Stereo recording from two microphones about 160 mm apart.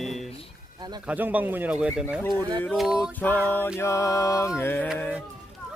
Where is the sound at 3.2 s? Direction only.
10° left (ahead or behind).